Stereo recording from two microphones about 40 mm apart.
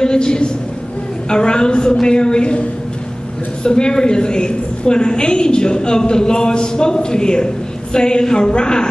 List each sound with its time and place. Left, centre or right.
0.0 s a woman's voice: centre
3.6 s a woman's voice: left